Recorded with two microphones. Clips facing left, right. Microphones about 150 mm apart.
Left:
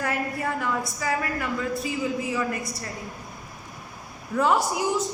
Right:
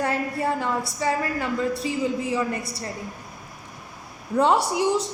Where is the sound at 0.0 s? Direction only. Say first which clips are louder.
Right 3 dB; 30° right (ahead or behind).